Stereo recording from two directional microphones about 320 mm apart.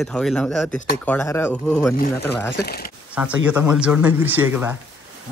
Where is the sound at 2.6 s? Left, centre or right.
Left.